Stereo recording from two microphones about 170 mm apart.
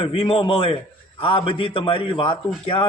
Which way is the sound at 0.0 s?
30° left (ahead or behind).